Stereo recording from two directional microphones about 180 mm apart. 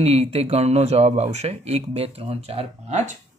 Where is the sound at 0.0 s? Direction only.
35° right (ahead or behind).